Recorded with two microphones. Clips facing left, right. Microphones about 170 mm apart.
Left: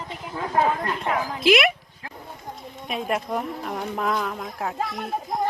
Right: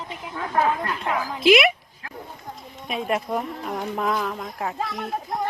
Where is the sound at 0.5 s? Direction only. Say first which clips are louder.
Even; 30° left (ahead or behind).